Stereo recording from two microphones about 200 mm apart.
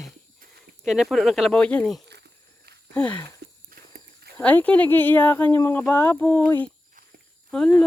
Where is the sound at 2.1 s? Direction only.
55° right (ahead or behind).